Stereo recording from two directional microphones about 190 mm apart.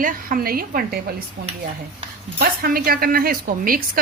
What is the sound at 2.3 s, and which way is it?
Speech, 50° right (ahead or behind).